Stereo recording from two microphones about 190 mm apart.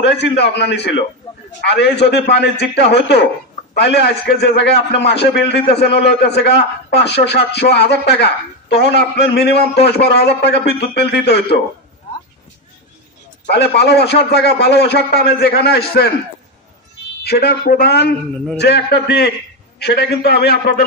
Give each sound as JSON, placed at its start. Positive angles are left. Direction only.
{"t": 0.0, "sound": "speech", "side_deg": 65}
{"t": 13.5, "sound": "speech", "side_deg": 60}
{"t": 17.2, "sound": "speech", "side_deg": 60}